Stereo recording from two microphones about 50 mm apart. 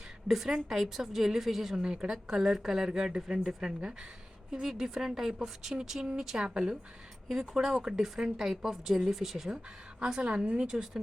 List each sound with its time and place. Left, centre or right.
0.3 s a woman's voice: centre
1.8 s a woman's voice: centre
10.0 s a woman's voice: centre